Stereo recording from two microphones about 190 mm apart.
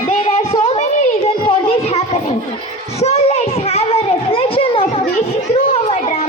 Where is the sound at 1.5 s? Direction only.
30° left (ahead or behind).